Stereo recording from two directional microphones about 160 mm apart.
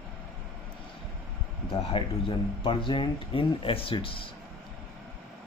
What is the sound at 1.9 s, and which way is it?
Speech, 35° left (ahead or behind).